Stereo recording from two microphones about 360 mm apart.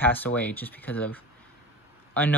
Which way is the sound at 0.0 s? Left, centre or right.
Centre.